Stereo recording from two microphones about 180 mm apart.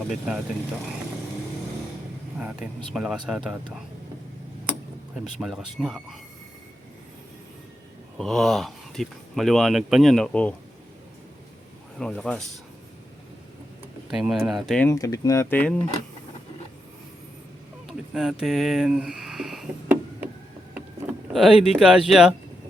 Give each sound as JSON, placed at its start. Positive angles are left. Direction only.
{"t": 0.1, "sound": "speech", "side_deg": 0}
{"t": 2.4, "sound": "speech", "side_deg": -5}
{"t": 5.1, "sound": "speech", "side_deg": -5}
{"t": 8.2, "sound": "speech", "side_deg": 0}
{"t": 11.9, "sound": "speech", "side_deg": 5}
{"t": 14.1, "sound": "speech", "side_deg": 0}
{"t": 14.9, "sound": "speech", "side_deg": 20}
{"t": 17.8, "sound": "a sound", "side_deg": 0}
{"t": 21.3, "sound": "speech", "side_deg": 0}